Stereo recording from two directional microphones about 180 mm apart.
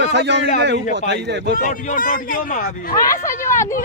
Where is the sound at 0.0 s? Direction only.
75° right (ahead or behind).